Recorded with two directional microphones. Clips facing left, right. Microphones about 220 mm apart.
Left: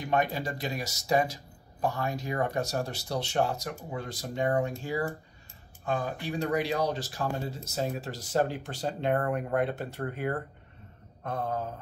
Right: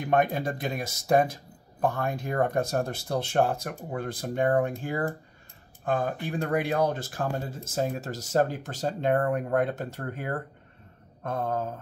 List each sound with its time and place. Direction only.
0.0 s speech: 55° right (ahead or behind)
11.2 s speech: 45° right (ahead or behind)